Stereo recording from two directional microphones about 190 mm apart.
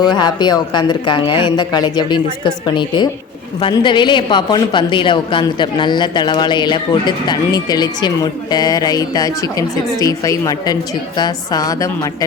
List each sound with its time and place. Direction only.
0.0 s a woman's voice: 20° left (ahead or behind)